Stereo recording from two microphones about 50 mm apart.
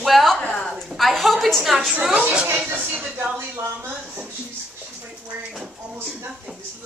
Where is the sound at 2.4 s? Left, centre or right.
Right.